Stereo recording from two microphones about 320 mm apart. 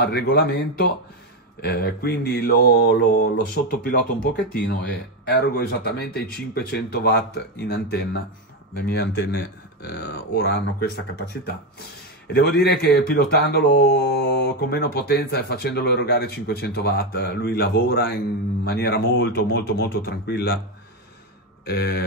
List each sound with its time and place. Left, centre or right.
0.0 s speech: left
5.2 s speech: left
12.4 s a man's voice: left
21.6 s speech: left